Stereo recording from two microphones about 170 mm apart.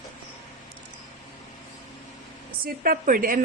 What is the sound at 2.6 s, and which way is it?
Speech, 60° right (ahead or behind).